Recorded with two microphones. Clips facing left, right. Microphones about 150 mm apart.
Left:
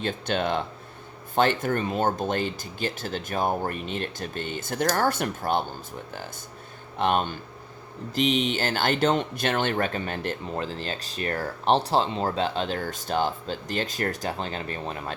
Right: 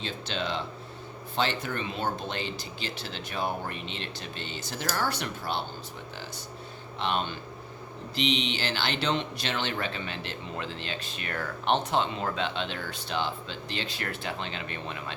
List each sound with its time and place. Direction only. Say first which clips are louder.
0.0 s speech: left 6 dB; 50° left (ahead or behind)
7.0 s speech: left 6 dB; 50° left (ahead or behind)